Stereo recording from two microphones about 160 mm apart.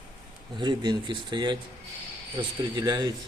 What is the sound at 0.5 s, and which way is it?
Speech, 30° right (ahead or behind).